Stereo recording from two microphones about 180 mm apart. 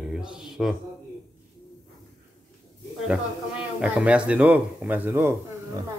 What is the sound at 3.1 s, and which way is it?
A man's voice, 5° right (ahead or behind).